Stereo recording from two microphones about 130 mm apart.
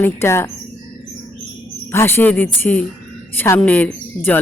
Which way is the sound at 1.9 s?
15° left (ahead or behind).